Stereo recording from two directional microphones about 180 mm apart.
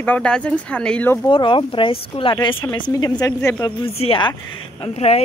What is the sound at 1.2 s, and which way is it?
Speech, 30° left (ahead or behind).